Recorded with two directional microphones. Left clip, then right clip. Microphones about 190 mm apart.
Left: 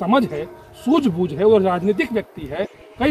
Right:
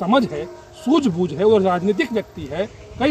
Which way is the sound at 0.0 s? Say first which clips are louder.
Even; 5° left (ahead or behind).